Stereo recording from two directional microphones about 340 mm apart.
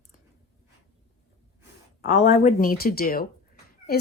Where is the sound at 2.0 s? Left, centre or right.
Left.